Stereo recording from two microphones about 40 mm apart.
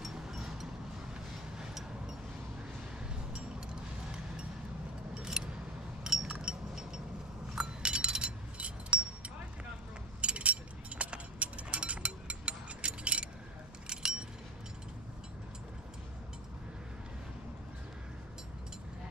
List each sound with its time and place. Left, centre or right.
0.0 s vehicle: centre
5.2 s keys jangling: centre
6.7 s a sound: centre
13.8 s keys jangling: centre